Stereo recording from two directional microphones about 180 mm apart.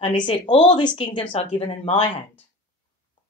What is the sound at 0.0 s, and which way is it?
Speech, 25° left (ahead or behind).